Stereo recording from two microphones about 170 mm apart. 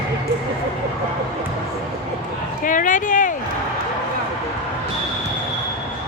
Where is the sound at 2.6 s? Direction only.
50° left (ahead or behind).